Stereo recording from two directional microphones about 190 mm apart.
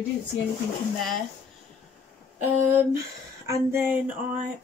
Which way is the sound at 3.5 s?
10° right (ahead or behind).